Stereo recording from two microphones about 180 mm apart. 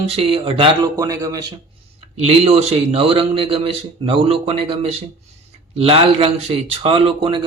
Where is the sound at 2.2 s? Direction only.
35° right (ahead or behind).